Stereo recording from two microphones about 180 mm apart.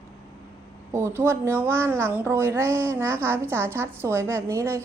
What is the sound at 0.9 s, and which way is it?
Speech, 15° right (ahead or behind).